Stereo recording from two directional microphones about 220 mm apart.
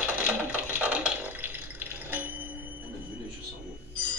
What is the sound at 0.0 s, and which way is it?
Water, 5° right (ahead or behind).